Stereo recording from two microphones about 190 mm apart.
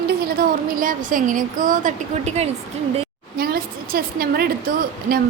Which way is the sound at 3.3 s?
55° right (ahead or behind).